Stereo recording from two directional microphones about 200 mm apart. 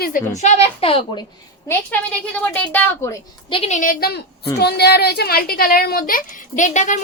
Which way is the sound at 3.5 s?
30° left (ahead or behind).